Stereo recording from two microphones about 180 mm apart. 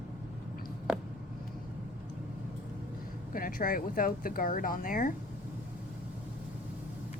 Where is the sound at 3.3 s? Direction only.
50° left (ahead or behind).